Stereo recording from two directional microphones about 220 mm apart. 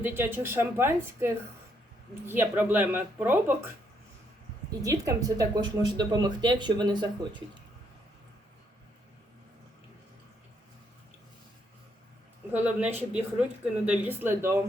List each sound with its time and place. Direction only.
0.0 s speech: 10° right (ahead or behind)
4.8 s speech: 15° right (ahead or behind)
12.5 s speech: 5° right (ahead or behind)